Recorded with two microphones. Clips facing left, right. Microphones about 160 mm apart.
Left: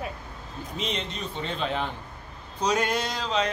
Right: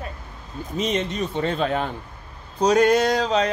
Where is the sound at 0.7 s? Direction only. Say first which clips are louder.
Right 9 dB; 50° right (ahead or behind).